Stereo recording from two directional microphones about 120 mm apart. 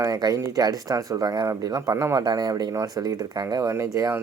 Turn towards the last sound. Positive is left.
turn(degrees=-25)  # may be behind; listen again after turning